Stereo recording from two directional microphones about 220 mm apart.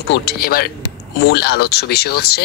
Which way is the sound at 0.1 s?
50° left (ahead or behind).